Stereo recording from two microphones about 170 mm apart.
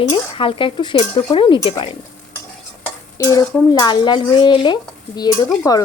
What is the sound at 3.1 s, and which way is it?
Speech, 20° left (ahead or behind).